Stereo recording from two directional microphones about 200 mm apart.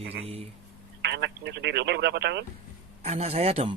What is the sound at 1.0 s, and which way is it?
Telephone, 60° right (ahead or behind).